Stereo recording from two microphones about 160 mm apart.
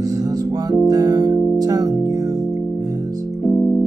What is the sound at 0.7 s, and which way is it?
Music, 25° right (ahead or behind).